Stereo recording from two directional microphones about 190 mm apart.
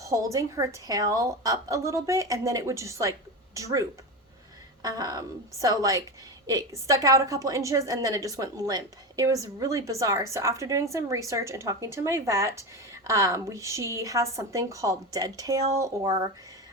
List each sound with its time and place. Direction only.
0.0 s a woman's voice: 15° right (ahead or behind)